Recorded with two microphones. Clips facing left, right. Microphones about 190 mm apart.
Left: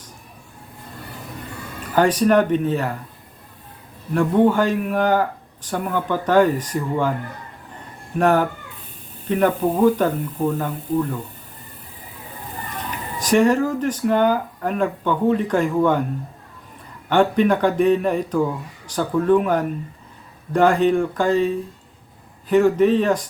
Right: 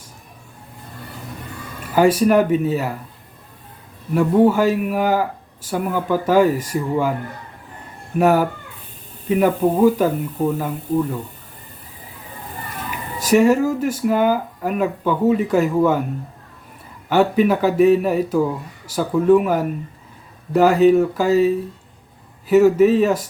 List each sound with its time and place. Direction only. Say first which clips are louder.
2.0 s speech: right 2 dB; 10° right (ahead or behind)
4.1 s speech: right 2 dB; 5° right (ahead or behind)
8.2 s speech: right 2 dB; 10° right (ahead or behind)
13.1 s speech: right 2 dB; 10° right (ahead or behind)
17.1 s speech: right 1 dB; 5° right (ahead or behind)